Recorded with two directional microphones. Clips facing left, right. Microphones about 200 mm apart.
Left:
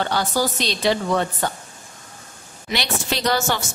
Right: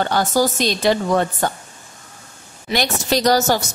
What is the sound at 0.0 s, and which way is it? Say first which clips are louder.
A woman's voice: right 4 dB; 45° right (ahead or behind).